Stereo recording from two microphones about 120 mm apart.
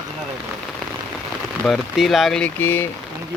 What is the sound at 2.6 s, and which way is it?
Speech, 15° left (ahead or behind).